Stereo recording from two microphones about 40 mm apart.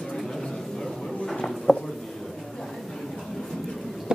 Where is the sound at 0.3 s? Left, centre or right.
Centre.